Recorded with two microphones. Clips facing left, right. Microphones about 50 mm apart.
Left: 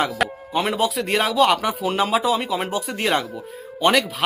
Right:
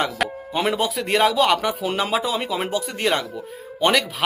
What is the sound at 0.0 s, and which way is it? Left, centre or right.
Speech, centre.